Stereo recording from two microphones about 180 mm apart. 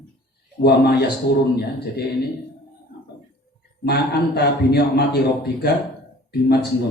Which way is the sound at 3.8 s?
65° left (ahead or behind).